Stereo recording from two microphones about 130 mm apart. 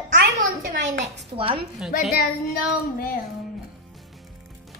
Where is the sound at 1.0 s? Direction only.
45° right (ahead or behind).